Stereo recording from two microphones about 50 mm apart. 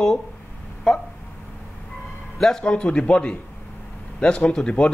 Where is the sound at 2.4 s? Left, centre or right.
Centre.